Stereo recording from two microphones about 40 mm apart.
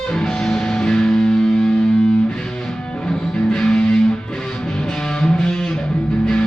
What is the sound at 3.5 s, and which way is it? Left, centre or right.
Music, centre.